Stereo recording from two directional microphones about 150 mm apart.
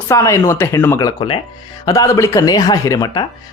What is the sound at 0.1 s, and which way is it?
Speech, 20° left (ahead or behind).